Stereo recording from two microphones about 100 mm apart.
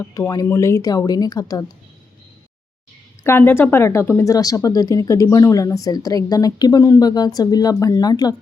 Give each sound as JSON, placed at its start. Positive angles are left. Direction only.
{"t": 0.0, "sound": "speech", "side_deg": 35}
{"t": 3.2, "sound": "a woman's voice", "side_deg": 20}